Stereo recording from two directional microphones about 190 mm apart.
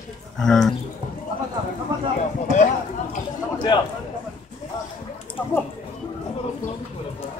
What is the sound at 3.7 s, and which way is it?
Speech, 25° left (ahead or behind).